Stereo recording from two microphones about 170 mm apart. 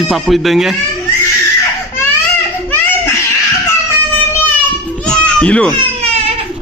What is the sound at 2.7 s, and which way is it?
Baby cry, 15° left (ahead or behind).